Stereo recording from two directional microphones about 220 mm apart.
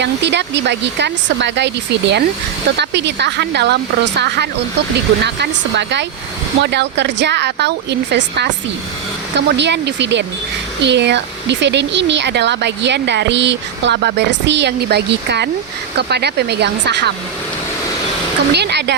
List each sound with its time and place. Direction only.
0.0 s speech: 50° right (ahead or behind)
18.5 s speech: 50° right (ahead or behind)